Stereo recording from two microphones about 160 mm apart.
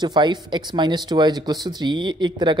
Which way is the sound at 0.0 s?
25° right (ahead or behind).